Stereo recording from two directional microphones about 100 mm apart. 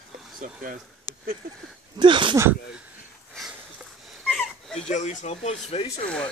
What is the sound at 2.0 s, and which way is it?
Speech, 55° right (ahead or behind).